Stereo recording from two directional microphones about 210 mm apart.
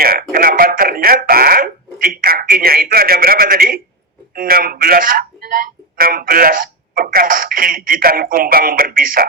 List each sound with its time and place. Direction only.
0.0 s speech: 45° right (ahead or behind)
0.3 s a sound: 45° right (ahead or behind)
4.4 s speech: 45° right (ahead or behind)